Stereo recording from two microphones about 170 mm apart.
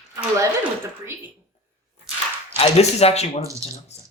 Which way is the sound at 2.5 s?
40° left (ahead or behind).